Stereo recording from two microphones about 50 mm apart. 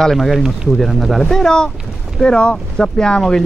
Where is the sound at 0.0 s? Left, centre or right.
Centre.